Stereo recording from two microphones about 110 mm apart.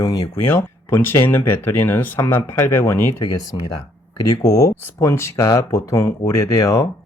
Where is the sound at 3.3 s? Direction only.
35° left (ahead or behind).